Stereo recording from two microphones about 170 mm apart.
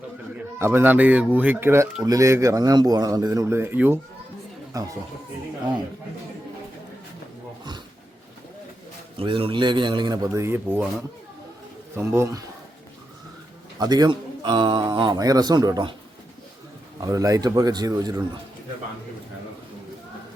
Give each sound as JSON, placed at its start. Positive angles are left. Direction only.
{"t": 0.3, "sound": "speech", "side_deg": -15}
{"t": 9.1, "sound": "speech", "side_deg": -30}
{"t": 11.9, "sound": "speech", "side_deg": -15}
{"t": 13.7, "sound": "speech", "side_deg": -25}
{"t": 17.0, "sound": "speech", "side_deg": -20}